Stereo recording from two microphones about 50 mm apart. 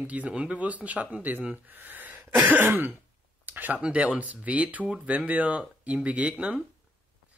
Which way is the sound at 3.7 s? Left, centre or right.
Right.